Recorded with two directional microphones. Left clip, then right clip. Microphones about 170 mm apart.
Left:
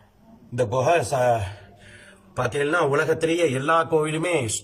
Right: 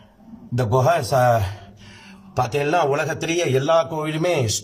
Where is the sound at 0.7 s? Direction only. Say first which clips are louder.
Right 3 dB; 30° right (ahead or behind).